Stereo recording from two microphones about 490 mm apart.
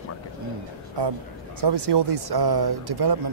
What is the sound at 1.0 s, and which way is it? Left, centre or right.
A man's voice, right.